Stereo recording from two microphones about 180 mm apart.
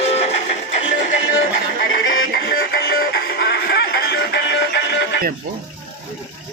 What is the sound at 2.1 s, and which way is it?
Music, 75° left (ahead or behind).